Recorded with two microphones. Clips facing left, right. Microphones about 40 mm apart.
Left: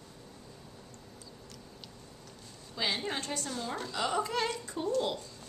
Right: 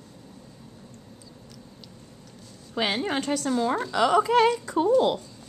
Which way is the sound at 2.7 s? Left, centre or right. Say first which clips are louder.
Right 7 dB; right.